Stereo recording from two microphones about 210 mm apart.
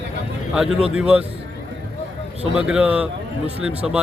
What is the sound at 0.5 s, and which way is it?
Speech, 5° right (ahead or behind).